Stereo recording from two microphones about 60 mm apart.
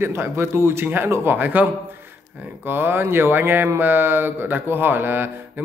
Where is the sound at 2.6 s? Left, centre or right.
Right.